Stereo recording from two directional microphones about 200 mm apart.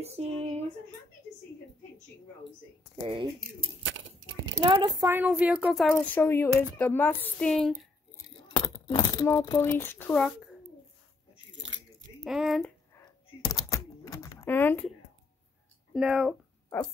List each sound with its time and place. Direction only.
0.0 s a sound: 30° right (ahead or behind)
3.0 s speech: 25° right (ahead or behind)
4.6 s speech: 20° right (ahead or behind)
5.9 s a woman's voice: 10° left (ahead or behind)
8.5 s speech: 25° left (ahead or behind); by 10.5 s 5° left (ahead or behind)
11.5 s a sound: 70° right (ahead or behind)
12.3 s speech: centre (ahead or behind)
12.9 s typewriter: 20° left (ahead or behind)
15.9 s speech: 5° right (ahead or behind)
16.6 s a sound: 15° left (ahead or behind)